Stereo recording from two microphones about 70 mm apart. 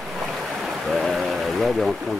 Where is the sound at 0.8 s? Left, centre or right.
Centre.